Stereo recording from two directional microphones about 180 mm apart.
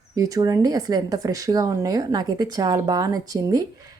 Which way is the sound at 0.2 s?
20° right (ahead or behind).